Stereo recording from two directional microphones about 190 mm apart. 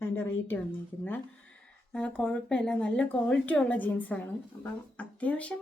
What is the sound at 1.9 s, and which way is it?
Speech, 5° left (ahead or behind).